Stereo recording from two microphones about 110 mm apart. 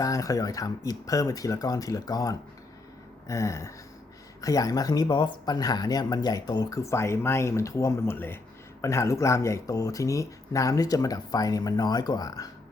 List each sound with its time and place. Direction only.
0.0 s speech: 30° left (ahead or behind)
3.2 s a sound: 30° left (ahead or behind)
4.4 s speech: 30° left (ahead or behind)